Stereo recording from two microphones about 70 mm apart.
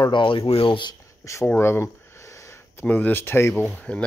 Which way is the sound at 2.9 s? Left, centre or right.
Left.